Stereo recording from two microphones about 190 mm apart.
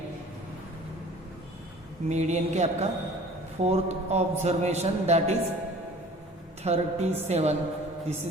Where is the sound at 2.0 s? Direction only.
35° right (ahead or behind).